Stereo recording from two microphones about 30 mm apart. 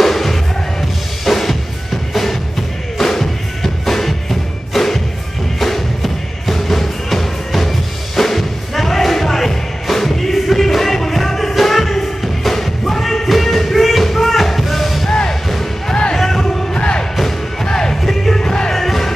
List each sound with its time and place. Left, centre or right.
0.0 s music: centre
3.0 s music: centre
16.7 s music: left
17.6 s music: centre
18.0 s music: centre
18.4 s music: left
18.7 s music: centre